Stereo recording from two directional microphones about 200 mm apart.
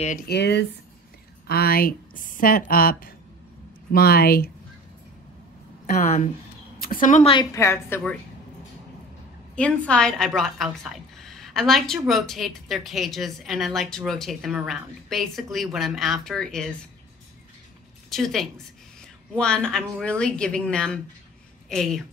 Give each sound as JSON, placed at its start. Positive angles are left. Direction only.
{"t": 0.3, "sound": "a woman's voice", "side_deg": 60}
{"t": 5.9, "sound": "a woman's voice", "side_deg": 35}
{"t": 7.3, "sound": "a woman's voice", "side_deg": 15}
{"t": 9.6, "sound": "a woman's voice", "side_deg": 5}
{"t": 11.1, "sound": "a sound", "side_deg": 0}
{"t": 12.1, "sound": "a woman's voice", "side_deg": 0}
{"t": 18.1, "sound": "a woman's voice", "side_deg": 0}